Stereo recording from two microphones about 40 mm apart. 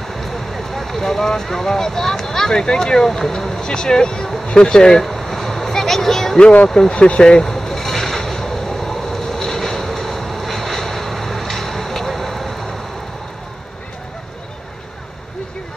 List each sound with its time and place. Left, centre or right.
0.1 s speech: centre
5.0 s a sound: centre
6.7 s vehicle: centre